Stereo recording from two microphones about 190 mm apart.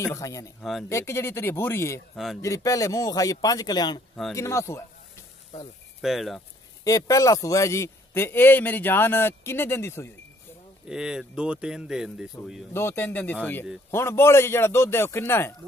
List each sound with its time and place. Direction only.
0.0 s a man's voice: 15° left (ahead or behind)
0.6 s speech: centre (ahead or behind)
0.8 s a man's voice: 15° left (ahead or behind)
5.9 s speech: centre (ahead or behind)
6.8 s a man's voice: 20° left (ahead or behind)
10.9 s speech: 5° right (ahead or behind)
12.7 s a man's voice: 10° left (ahead or behind)